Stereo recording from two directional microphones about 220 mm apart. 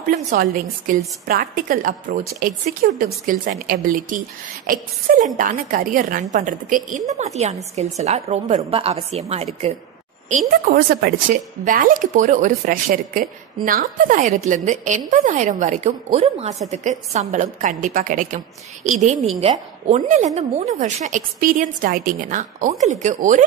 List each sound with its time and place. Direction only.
0.1 s a woman's voice: 45° right (ahead or behind); by 9.8 s 30° right (ahead or behind)
10.7 s a woman's voice: 40° right (ahead or behind)